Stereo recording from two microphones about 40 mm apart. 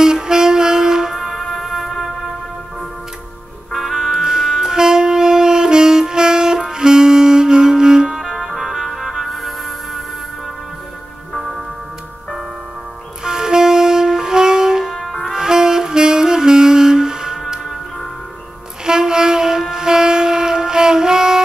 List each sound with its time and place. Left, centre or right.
0.0 s music: centre
3.7 s wind instrument: centre
8.2 s music: centre
11.3 s music: centre
13.2 s wind instrument: centre
15.3 s saxophone: centre
18.9 s train: centre